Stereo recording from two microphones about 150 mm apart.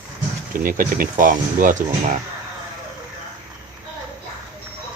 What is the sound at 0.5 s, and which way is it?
Speech, 70° right (ahead or behind).